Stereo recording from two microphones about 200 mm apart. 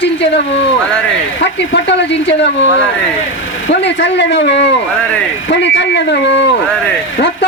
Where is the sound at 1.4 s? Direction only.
60° left (ahead or behind).